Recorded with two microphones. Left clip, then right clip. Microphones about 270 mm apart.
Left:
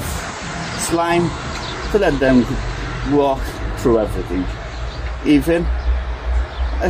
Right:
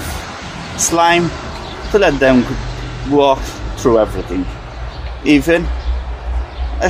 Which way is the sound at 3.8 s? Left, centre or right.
Right.